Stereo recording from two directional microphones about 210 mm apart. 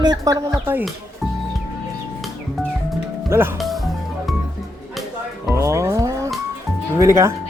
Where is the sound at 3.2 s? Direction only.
10° right (ahead or behind).